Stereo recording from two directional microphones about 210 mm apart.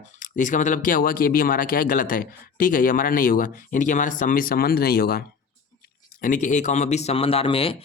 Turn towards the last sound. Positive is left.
turn(degrees=25)  # may be behind; listen again after turning